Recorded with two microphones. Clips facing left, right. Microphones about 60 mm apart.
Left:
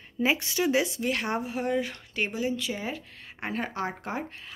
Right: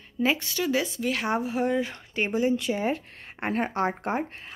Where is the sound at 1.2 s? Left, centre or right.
Centre.